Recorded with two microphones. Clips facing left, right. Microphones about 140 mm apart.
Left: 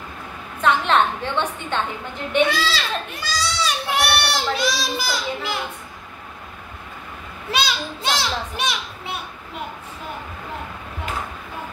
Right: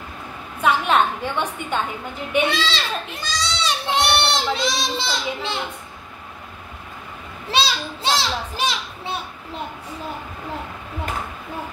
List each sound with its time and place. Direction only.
0.6 s a sound: 10° right (ahead or behind)
2.4 s a child's voice: 25° right (ahead or behind)
7.5 s a child's voice: 30° right (ahead or behind)